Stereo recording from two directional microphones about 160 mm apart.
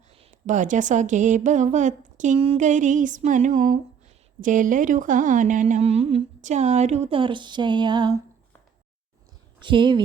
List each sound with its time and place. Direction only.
0.1 s speech: 45° right (ahead or behind); by 8.2 s 30° right (ahead or behind)
9.6 s speech: 30° right (ahead or behind)